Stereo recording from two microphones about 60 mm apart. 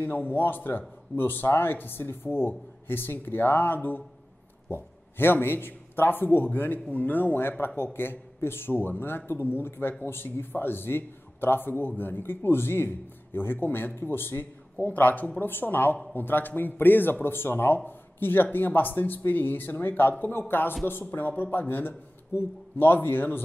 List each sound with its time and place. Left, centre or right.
0.0 s a man's voice: left